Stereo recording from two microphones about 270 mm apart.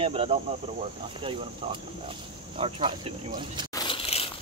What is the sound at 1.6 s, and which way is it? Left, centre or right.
Speech, centre.